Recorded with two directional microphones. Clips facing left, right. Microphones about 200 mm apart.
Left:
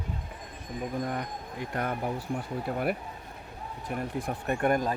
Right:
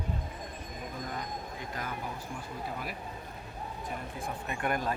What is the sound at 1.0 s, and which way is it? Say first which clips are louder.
Speech: left 5 dB; 60° left (ahead or behind).